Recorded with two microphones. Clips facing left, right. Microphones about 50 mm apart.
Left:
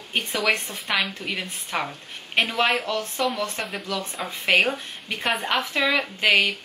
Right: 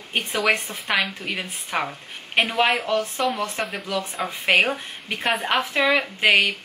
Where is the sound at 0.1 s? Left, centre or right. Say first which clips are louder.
Right 2 dB; centre.